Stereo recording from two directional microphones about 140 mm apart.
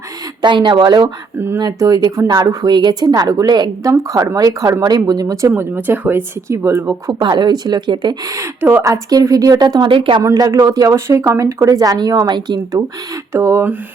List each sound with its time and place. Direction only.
0.4 s a woman's voice: 35° right (ahead or behind); by 6.9 s 15° right (ahead or behind)
7.1 s a woman's voice: 30° right (ahead or behind)
10.2 s a woman's voice: 25° right (ahead or behind)